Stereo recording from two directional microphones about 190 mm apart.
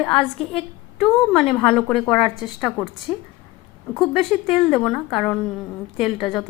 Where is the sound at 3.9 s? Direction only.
5° left (ahead or behind).